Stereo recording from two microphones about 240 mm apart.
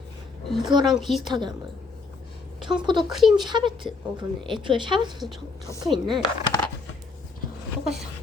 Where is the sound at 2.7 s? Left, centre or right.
Centre.